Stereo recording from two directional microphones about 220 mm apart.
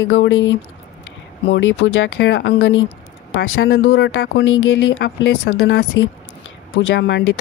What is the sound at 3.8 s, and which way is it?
Speech, 50° left (ahead or behind).